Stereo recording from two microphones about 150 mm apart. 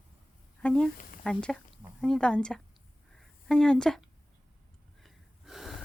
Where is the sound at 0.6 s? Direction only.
5° left (ahead or behind).